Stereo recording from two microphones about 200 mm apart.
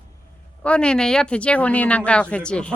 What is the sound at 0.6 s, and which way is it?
Speech, 5° left (ahead or behind).